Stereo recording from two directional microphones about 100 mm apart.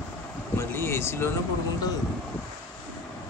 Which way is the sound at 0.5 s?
25° left (ahead or behind).